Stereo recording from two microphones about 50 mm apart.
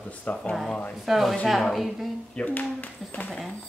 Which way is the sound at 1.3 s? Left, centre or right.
Centre.